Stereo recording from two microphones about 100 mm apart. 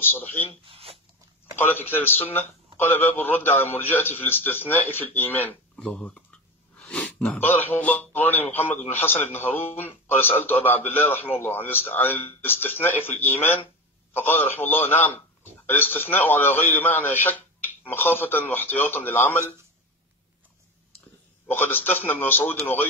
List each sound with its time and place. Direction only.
0.0 s a man's voice: 20° left (ahead or behind)
0.7 s a sound: 70° right (ahead or behind)
1.6 s a man's voice: 20° left (ahead or behind)
6.8 s a sound: 10° left (ahead or behind)
7.3 s a man's voice: 20° left (ahead or behind)
21.5 s a man's voice: 20° left (ahead or behind)